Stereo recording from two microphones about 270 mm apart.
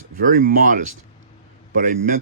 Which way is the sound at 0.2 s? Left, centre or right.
Right.